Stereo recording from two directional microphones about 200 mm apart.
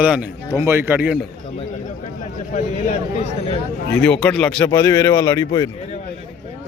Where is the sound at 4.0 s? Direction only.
5° left (ahead or behind).